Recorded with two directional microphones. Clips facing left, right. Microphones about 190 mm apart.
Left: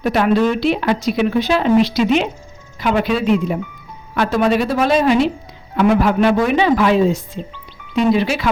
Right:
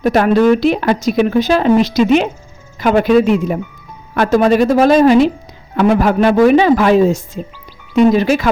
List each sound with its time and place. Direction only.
0.0 s speech: 45° right (ahead or behind)